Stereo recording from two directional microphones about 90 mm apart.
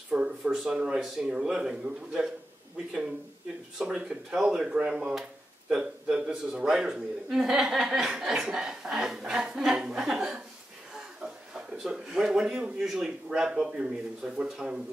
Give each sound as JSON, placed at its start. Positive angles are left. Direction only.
{"t": 0.1, "sound": "a man's voice", "side_deg": -10}
{"t": 3.7, "sound": "a man's voice", "side_deg": -10}
{"t": 11.5, "sound": "a man's voice", "side_deg": -5}